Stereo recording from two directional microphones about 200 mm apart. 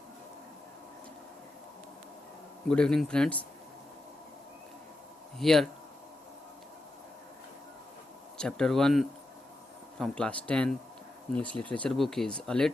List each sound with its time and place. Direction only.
2.6 s speech: 5° left (ahead or behind)
5.4 s speech: centre (ahead or behind)
8.4 s speech: 5° left (ahead or behind)